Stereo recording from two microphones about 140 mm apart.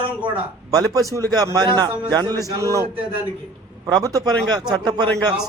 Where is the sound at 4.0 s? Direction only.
30° right (ahead or behind).